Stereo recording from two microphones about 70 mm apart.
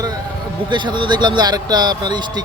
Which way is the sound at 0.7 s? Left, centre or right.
Right.